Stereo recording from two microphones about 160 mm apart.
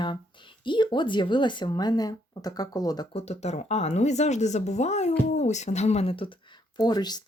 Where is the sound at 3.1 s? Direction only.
40° left (ahead or behind).